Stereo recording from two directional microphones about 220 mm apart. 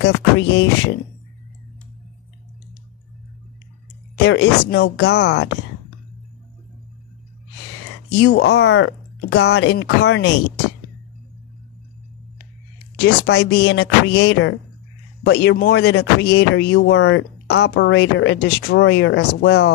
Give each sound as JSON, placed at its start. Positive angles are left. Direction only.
{"t": 0.0, "sound": "speech", "side_deg": 55}
{"t": 4.2, "sound": "speech", "side_deg": 50}
{"t": 8.1, "sound": "speech", "side_deg": 50}
{"t": 12.9, "sound": "speech", "side_deg": 45}